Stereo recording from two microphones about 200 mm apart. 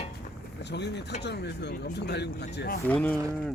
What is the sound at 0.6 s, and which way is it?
Speech, 60° left (ahead or behind).